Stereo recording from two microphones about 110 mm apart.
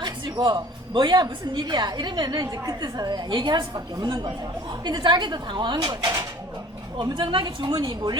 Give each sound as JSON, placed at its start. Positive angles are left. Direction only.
{"t": 0.0, "sound": "a woman's voice", "side_deg": -40}
{"t": 7.0, "sound": "a woman's voice", "side_deg": -50}